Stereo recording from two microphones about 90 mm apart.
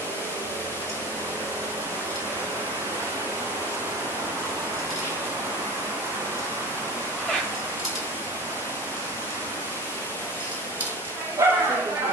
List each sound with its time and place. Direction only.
11.4 s bow-wow: 25° right (ahead or behind)